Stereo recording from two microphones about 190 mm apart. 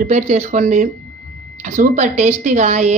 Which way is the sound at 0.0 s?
40° right (ahead or behind).